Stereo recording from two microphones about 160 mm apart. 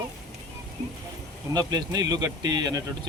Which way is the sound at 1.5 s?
25° right (ahead or behind).